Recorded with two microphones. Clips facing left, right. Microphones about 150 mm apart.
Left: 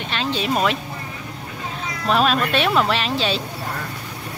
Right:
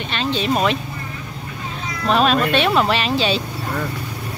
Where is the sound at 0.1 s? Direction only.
5° left (ahead or behind).